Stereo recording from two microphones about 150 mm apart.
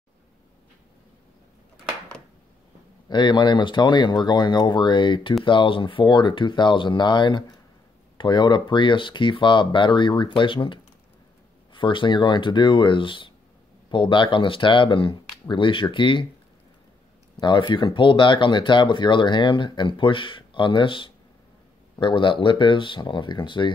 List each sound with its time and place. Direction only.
3.1 s speech: 30° left (ahead or behind)
17.4 s speech: 30° left (ahead or behind)